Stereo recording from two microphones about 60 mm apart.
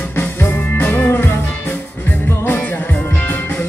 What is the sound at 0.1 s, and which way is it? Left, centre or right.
Music, left.